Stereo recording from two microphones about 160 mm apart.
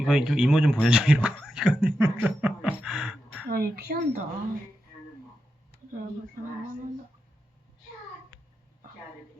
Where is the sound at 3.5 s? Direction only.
80° right.